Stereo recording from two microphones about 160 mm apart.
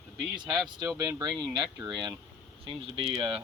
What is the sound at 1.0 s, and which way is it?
Speech, 25° right (ahead or behind).